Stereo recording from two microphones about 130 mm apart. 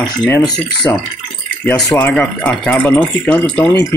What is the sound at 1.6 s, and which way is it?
Speech, 10° left (ahead or behind).